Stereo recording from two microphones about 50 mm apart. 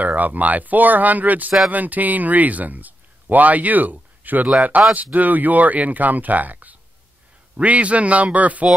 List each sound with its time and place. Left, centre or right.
0.0 s a man's voice: right